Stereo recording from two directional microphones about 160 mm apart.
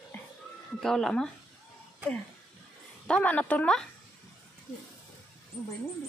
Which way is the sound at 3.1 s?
10° left (ahead or behind).